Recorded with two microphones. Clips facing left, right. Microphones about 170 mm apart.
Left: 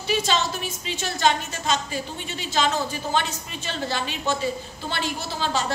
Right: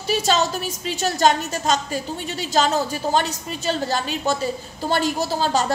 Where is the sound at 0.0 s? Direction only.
40° right (ahead or behind).